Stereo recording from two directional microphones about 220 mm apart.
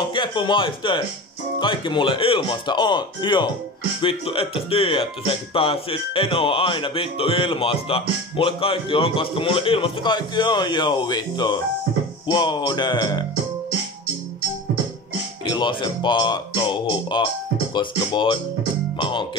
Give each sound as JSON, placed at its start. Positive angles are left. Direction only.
{"t": 0.1, "sound": "speech", "side_deg": 20}
{"t": 15.4, "sound": "speech", "side_deg": 20}
{"t": 18.9, "sound": "music", "side_deg": 20}